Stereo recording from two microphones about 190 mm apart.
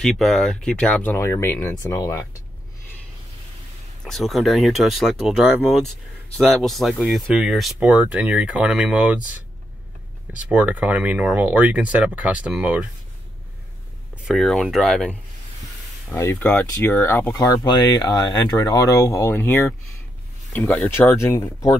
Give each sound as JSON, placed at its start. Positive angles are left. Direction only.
{"t": 0.0, "sound": "speech", "side_deg": 0}
{"t": 4.0, "sound": "speech", "side_deg": 0}
{"t": 10.5, "sound": "speech", "side_deg": -10}
{"t": 14.1, "sound": "speech", "side_deg": 0}
{"t": 16.2, "sound": "speech", "side_deg": 10}
{"t": 20.5, "sound": "speech", "side_deg": 10}